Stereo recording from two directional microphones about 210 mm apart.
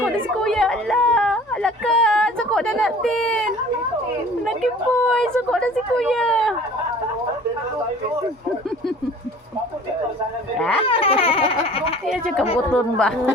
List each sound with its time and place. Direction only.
0.0 s speech: centre (ahead or behind)
4.4 s a woman's voice: centre (ahead or behind)
10.8 s baby laughter: 25° left (ahead or behind)
12.0 s a sound: centre (ahead or behind)
12.7 s a woman's voice: 5° left (ahead or behind)